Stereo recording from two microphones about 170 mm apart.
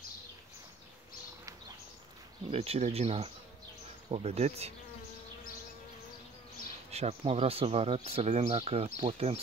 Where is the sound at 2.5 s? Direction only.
35° right (ahead or behind).